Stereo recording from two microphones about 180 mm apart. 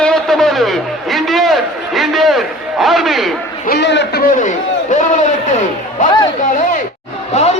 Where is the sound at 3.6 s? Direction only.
65° left (ahead or behind).